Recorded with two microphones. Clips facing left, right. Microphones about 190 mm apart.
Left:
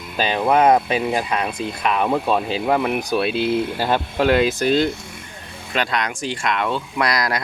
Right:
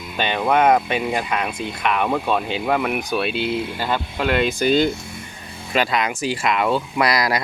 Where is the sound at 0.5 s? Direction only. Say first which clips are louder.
Left 1 dB; 30° left (ahead or behind).